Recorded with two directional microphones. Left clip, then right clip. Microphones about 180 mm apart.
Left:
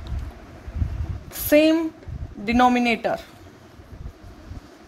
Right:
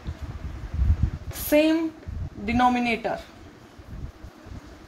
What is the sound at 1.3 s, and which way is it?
A woman's voice, 65° left (ahead or behind).